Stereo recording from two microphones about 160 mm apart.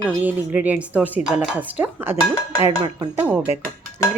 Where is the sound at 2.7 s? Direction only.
25° right (ahead or behind).